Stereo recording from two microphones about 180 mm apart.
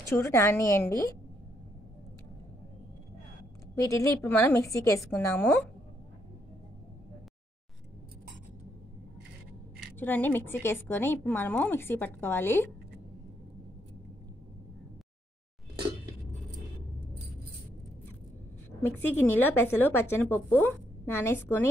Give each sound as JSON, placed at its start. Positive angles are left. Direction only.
{"t": 0.0, "sound": "speech", "side_deg": 15}
{"t": 3.7, "sound": "speech", "side_deg": 15}
{"t": 9.9, "sound": "speech", "side_deg": 10}
{"t": 18.8, "sound": "speech", "side_deg": 10}